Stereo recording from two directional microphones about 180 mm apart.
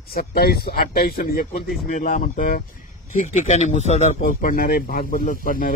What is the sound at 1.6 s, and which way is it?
Speech, 45° left (ahead or behind).